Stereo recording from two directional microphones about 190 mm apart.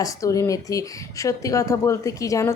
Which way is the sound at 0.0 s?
15° left (ahead or behind).